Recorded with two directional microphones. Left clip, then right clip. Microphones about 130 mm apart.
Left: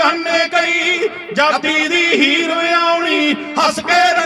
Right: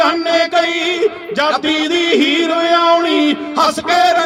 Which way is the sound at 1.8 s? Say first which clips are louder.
Left 1 dB; 35° left (ahead or behind).